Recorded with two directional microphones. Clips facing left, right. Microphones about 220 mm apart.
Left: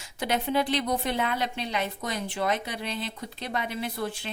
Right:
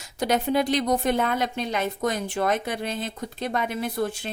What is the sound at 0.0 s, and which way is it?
A woman's voice, 40° right (ahead or behind).